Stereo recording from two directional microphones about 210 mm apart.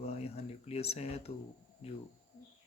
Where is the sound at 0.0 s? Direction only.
30° left (ahead or behind).